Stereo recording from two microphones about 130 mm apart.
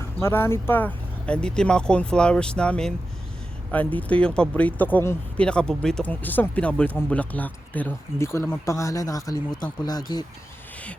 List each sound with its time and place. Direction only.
0.0 s speech: 20° left (ahead or behind)